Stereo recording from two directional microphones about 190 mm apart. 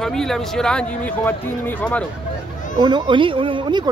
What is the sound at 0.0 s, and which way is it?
Speech, centre (ahead or behind).